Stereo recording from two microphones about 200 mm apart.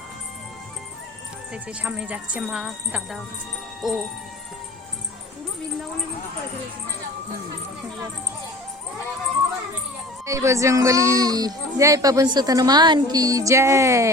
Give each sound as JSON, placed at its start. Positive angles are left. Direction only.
{"t": 1.8, "sound": "a woman's voice", "side_deg": -5}
{"t": 10.2, "sound": "speech", "side_deg": -15}